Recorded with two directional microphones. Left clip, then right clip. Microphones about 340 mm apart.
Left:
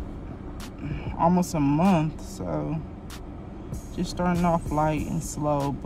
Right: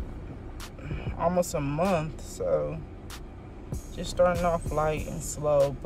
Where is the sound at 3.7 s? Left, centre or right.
Centre.